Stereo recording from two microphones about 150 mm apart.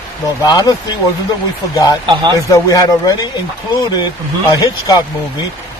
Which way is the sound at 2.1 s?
30° right (ahead or behind).